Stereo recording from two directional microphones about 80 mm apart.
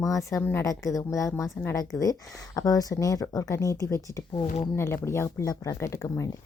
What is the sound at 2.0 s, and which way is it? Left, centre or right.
A woman's voice, left.